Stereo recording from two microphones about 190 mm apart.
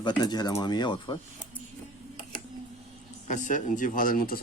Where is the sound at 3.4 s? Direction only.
40° left (ahead or behind).